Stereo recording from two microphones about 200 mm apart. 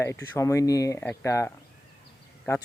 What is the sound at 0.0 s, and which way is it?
Speech, 15° left (ahead or behind).